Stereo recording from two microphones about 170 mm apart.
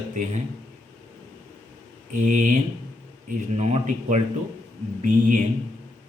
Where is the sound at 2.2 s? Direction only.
45° right (ahead or behind).